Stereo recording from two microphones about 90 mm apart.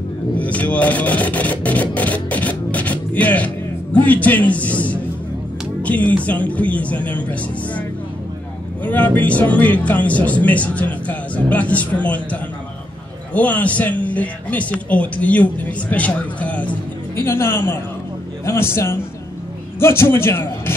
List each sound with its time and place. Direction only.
0.4 s filing: 15° left (ahead or behind)
4.0 s a man's voice: 15° left (ahead or behind)
5.8 s music: 15° left (ahead or behind)
6.2 s speech: 15° left (ahead or behind)
8.8 s speech: 15° left (ahead or behind)
17.1 s a man's voice: 25° left (ahead or behind)